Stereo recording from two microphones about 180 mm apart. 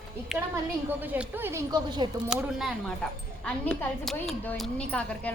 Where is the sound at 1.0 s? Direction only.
10° right (ahead or behind); by 2.2 s 25° right (ahead or behind).